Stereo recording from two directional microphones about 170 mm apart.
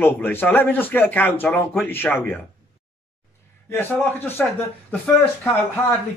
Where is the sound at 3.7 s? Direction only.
10° left (ahead or behind).